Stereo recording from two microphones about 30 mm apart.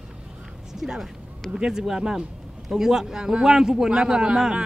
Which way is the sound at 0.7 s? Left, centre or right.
Centre.